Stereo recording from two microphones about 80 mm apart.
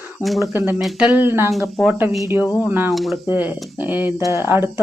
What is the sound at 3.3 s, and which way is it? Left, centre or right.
Speech, right.